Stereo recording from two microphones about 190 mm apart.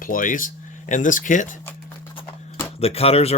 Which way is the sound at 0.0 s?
45° left (ahead or behind).